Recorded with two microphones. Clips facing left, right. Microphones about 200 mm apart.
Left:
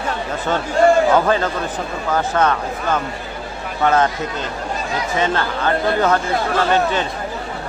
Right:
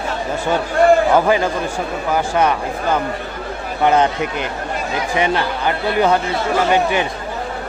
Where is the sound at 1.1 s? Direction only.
10° right (ahead or behind).